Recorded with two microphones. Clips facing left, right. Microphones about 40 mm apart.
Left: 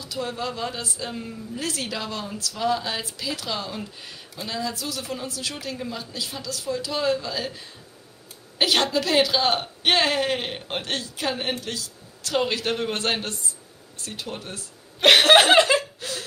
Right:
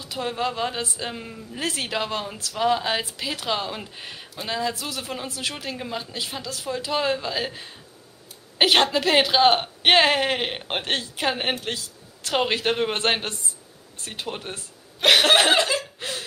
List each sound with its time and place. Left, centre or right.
0.0 s speech: right
15.0 s cough: centre
15.5 s chuckle: left
16.0 s chuckle: right